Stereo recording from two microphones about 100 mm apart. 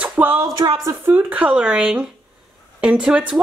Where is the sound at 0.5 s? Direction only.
45° right (ahead or behind).